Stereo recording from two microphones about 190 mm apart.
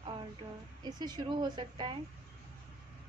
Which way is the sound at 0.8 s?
20° right (ahead or behind).